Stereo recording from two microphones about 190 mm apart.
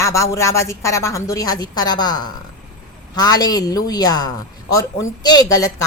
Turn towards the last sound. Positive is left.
turn(degrees=20)  # may be behind; listen again after turning